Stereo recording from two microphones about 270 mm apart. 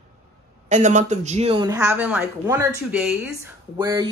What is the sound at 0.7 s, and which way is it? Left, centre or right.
Speech, right.